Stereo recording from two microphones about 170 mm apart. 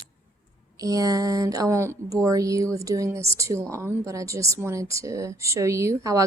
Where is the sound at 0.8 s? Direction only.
20° right (ahead or behind).